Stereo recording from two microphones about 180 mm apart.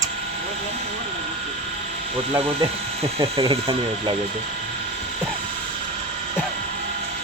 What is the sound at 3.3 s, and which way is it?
Speech, 30° right (ahead or behind).